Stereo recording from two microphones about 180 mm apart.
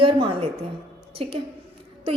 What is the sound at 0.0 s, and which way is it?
A woman's voice, 30° right (ahead or behind).